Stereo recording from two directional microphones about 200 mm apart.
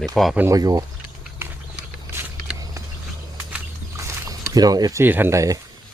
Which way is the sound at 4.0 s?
15° right (ahead or behind).